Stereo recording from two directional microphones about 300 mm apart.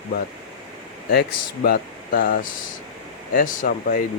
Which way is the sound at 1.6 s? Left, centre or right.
Left.